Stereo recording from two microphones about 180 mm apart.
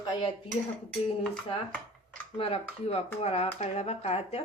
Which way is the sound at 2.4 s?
35° left (ahead or behind).